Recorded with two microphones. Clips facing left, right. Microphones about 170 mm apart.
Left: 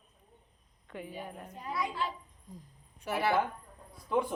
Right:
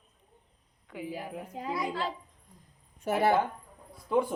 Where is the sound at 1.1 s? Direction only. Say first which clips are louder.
Right 5 dB; 90° right.